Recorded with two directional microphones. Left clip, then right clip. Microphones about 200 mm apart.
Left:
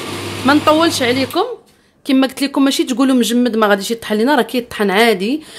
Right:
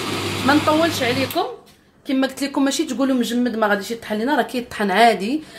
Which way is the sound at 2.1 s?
40° left (ahead or behind).